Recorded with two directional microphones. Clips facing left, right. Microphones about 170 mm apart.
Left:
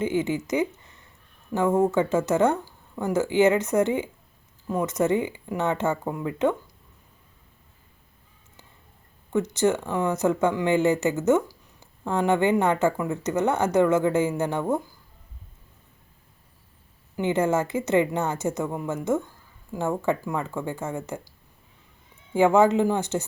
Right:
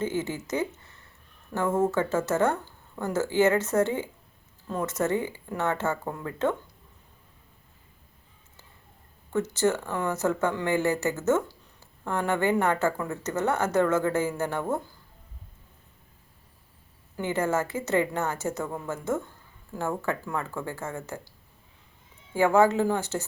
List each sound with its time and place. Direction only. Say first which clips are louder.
0.0 s speech: left 5 dB; 15° left (ahead or behind)
9.3 s speech: left 3 dB; 15° left (ahead or behind)
17.2 s a woman's voice: left 4 dB; 20° left (ahead or behind)
22.3 s a woman's voice: left 3 dB; 20° left (ahead or behind)